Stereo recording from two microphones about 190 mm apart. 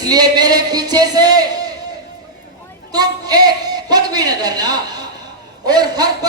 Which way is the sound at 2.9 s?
20° right (ahead or behind).